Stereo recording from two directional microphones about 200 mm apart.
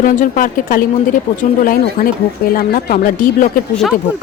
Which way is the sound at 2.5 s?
45° left (ahead or behind).